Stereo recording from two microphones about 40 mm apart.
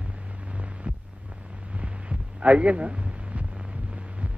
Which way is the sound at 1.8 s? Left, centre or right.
Right.